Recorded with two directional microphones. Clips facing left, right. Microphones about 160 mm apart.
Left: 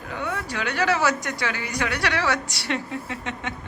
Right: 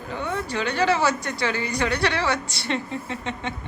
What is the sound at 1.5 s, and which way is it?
Speech, 15° left (ahead or behind).